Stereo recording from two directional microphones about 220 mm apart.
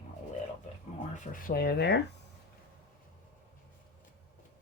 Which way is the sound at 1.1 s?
40° left (ahead or behind).